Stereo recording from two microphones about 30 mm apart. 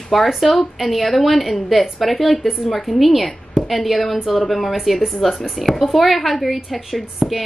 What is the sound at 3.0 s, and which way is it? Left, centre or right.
A woman's voice, centre.